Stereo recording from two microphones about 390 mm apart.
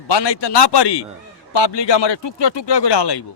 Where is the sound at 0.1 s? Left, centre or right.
Left.